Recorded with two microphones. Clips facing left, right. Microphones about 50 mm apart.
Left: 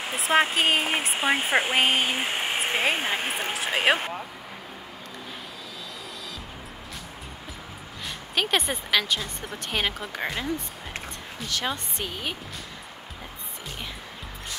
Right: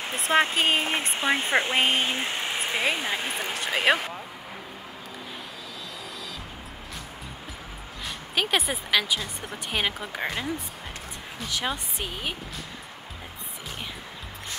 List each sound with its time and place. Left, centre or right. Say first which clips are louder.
0.1 s speech: left 1 dB; centre; by 2.4 s left
2.4 s speech: left 2 dB; left
3.7 s speech: even; left
8.4 s a woman's voice: even; centre